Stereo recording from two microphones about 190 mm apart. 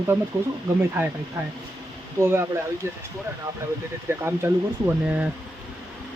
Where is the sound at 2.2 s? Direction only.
15° right (ahead or behind).